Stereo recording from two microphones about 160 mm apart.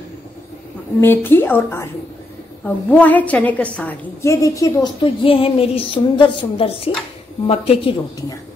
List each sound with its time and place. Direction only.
1.0 s a woman's voice: 15° left (ahead or behind)
5.0 s a woman's voice: 35° left (ahead or behind)